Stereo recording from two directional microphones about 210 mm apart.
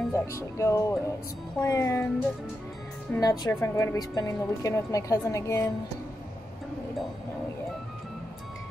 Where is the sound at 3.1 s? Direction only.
15° left (ahead or behind).